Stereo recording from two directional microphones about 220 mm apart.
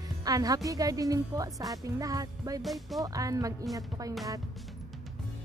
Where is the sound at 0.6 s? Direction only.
15° right (ahead or behind).